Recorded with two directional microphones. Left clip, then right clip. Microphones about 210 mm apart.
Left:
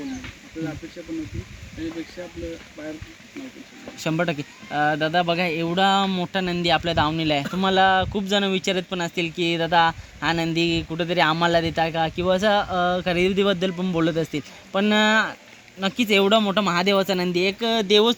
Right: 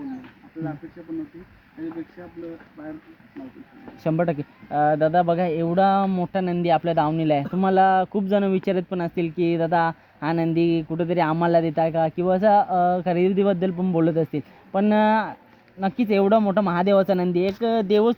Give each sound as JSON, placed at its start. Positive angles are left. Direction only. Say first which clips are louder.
{"t": 4.0, "sound": "speech", "louder": "right 1 dB", "side_deg": -40}